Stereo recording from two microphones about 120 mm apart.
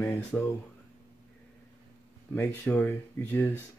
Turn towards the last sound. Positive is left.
turn(degrees=15)  # may be behind; listen again after turning